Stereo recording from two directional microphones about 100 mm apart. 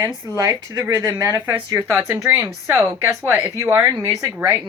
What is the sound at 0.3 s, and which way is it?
A woman's voice, 40° right (ahead or behind).